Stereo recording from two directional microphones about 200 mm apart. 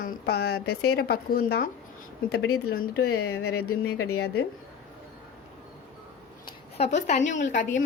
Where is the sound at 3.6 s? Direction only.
90° left.